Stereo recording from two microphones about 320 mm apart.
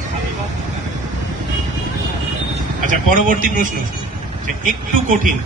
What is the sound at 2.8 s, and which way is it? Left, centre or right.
A man's voice, right.